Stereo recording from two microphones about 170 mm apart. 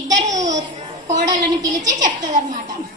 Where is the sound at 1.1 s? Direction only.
25° right (ahead or behind).